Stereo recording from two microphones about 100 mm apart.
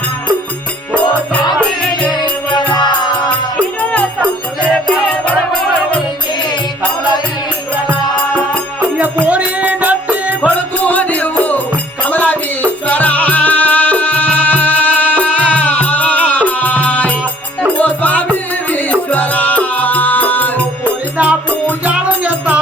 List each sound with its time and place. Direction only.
2.0 s music: centre (ahead or behind)
3.8 s music: 10° left (ahead or behind)
9.0 s music: 15° right (ahead or behind)
10.4 s music: 15° left (ahead or behind)
12.9 s music: 15° left (ahead or behind)
20.8 s music: 15° right (ahead or behind)